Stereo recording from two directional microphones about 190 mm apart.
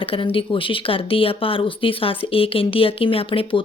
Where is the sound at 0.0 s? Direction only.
30° left (ahead or behind).